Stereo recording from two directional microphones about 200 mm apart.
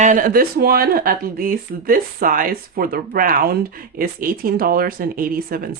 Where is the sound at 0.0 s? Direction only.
40° right (ahead or behind).